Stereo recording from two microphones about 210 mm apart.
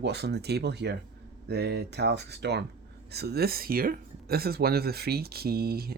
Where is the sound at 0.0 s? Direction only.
55° right (ahead or behind).